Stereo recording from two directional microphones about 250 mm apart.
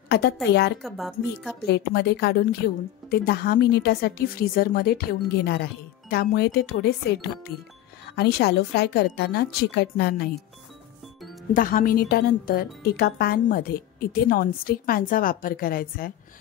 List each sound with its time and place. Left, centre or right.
0.1 s speech: left
0.8 s speech: centre
1.7 s speech: left
11.5 s speech: left